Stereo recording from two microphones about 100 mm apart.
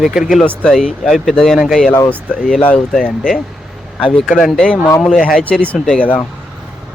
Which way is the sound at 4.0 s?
5° left (ahead or behind).